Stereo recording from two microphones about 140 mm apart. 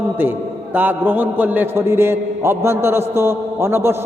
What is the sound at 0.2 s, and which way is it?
A man's voice, 15° right (ahead or behind).